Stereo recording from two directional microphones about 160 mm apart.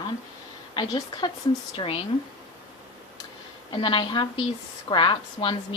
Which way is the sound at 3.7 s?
30° left (ahead or behind).